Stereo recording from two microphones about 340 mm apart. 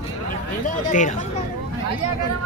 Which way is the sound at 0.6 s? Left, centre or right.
Left.